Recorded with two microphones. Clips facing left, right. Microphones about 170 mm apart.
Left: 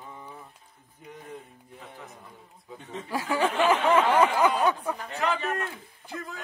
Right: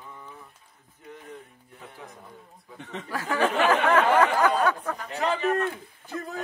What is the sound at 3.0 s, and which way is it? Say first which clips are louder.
Speech: right 1 dB; 15° left (ahead or behind).